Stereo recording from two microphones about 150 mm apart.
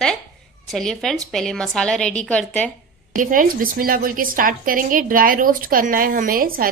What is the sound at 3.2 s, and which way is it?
A woman's voice, 65° right (ahead or behind).